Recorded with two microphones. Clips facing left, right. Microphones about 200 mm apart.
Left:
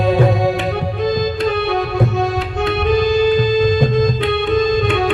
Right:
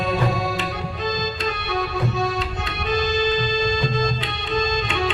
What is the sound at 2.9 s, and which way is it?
Organ, 55° left (ahead or behind).